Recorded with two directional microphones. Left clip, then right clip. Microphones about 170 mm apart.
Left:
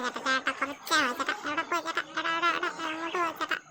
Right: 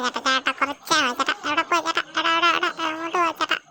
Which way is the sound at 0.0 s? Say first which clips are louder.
Right 7 dB; 30° right (ahead or behind).